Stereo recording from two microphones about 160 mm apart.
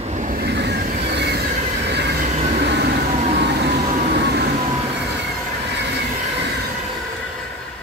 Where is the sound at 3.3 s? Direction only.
90° right.